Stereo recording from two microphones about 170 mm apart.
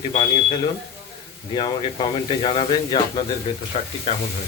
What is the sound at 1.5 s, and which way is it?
Speech, 30° left (ahead or behind).